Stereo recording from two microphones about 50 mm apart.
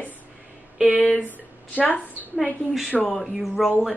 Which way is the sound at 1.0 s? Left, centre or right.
Left.